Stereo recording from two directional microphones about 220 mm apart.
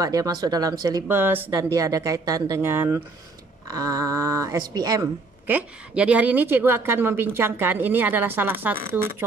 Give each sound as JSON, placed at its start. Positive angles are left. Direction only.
{"t": 0.0, "sound": "speech", "side_deg": -15}
{"t": 5.5, "sound": "speech", "side_deg": -5}